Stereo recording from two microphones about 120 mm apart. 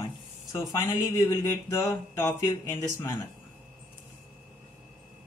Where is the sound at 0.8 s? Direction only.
35° left (ahead or behind).